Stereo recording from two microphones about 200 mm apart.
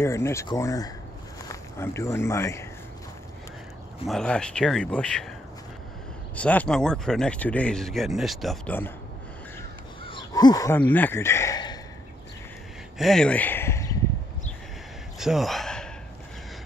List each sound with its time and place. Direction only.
0.0 s speech: 15° left (ahead or behind)
4.1 s speech: 5° left (ahead or behind)
6.3 s speech: 5° left (ahead or behind)
10.0 s crow: 25° left (ahead or behind)
12.9 s speech: centre (ahead or behind)
15.1 s a sound: centre (ahead or behind)